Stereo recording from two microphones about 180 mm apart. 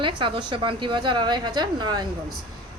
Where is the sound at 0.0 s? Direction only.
25° right (ahead or behind).